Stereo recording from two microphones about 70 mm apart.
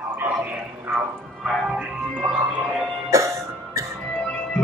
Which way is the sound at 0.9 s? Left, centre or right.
Right.